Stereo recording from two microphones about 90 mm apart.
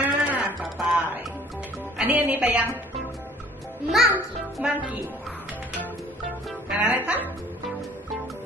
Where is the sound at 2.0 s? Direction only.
20° right (ahead or behind).